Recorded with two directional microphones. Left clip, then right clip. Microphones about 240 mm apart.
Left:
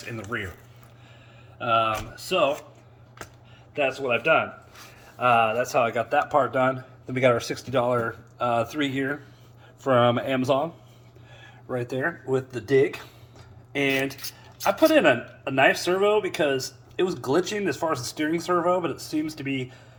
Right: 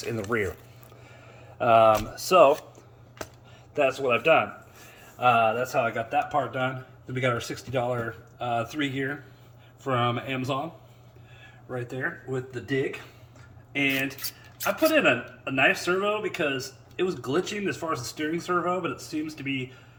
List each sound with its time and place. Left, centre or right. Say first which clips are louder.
0.0 s speech: right 4 dB; centre
1.5 s speech: right 5 dB; centre
3.8 s speech: right 1 dB; centre
11.7 s speech: left 5 dB; centre
13.7 s speech: left 2 dB; centre